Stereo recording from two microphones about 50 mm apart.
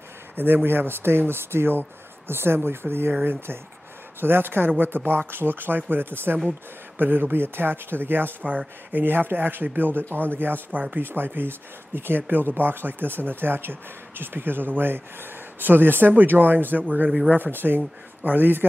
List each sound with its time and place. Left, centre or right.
0.7 s speech: right